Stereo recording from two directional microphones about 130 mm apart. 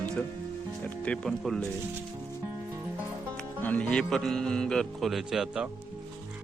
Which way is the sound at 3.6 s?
10° left (ahead or behind).